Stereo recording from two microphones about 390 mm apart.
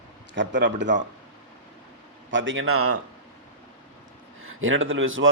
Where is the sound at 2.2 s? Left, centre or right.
Right.